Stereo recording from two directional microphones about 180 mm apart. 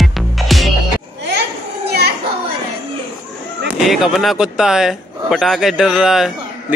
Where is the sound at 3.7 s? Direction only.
Centre (ahead or behind).